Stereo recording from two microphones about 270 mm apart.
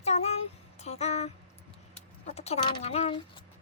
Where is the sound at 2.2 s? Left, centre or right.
Left.